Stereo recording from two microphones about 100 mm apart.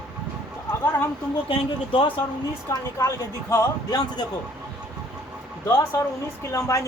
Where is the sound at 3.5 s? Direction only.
40° left (ahead or behind).